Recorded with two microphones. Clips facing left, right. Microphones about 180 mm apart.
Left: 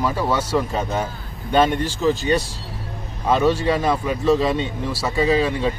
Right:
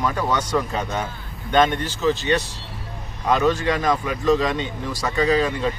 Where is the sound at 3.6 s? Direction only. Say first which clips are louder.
Left 2 dB; 30° left (ahead or behind).